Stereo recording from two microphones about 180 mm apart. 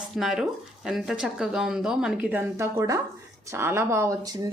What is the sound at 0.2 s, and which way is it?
Speech, 5° right (ahead or behind).